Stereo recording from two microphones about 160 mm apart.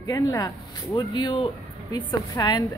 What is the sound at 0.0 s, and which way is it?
Speech, 20° left (ahead or behind).